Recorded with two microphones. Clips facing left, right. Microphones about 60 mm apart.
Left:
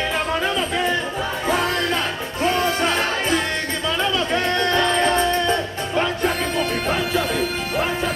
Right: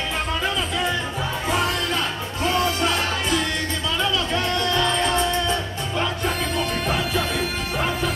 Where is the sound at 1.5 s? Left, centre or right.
Left.